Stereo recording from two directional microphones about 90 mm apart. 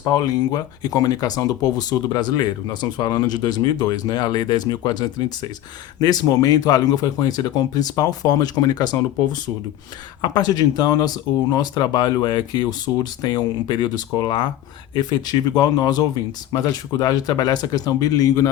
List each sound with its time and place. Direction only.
0.2 s speech: 50° left (ahead or behind)